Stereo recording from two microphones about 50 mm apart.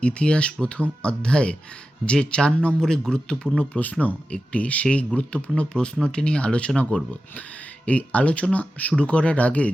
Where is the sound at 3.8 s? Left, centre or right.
Left.